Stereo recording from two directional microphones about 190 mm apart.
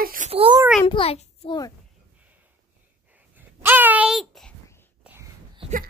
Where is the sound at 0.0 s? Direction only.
50° right (ahead or behind).